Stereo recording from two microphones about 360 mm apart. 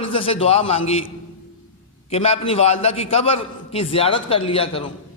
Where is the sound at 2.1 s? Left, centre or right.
Centre.